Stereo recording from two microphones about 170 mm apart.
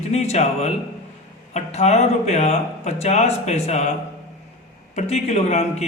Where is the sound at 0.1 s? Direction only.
40° left (ahead or behind).